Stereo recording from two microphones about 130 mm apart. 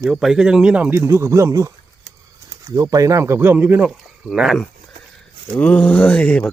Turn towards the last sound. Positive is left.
turn(degrees=10)  # may be behind; listen again after turning